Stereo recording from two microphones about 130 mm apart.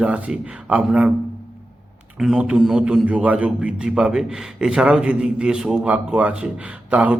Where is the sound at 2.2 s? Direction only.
5° right (ahead or behind).